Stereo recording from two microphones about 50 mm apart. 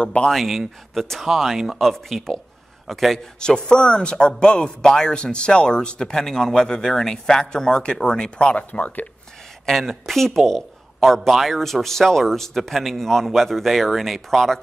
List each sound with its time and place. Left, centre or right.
0.0 s a man's voice: left
0.3 s speech: centre
3.3 s a man's voice: centre
9.7 s speech: centre